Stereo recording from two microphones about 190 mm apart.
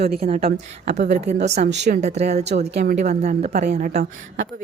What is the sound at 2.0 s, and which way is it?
A woman's voice, 35° right (ahead or behind).